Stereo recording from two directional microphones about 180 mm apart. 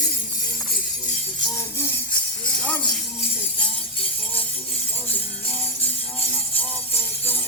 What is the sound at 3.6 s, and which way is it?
Music, 5° left (ahead or behind).